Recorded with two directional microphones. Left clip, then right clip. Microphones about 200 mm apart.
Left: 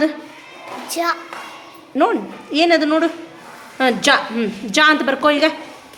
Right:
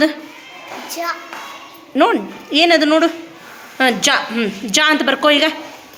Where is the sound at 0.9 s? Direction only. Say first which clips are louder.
Left 3 dB; 55° left (ahead or behind).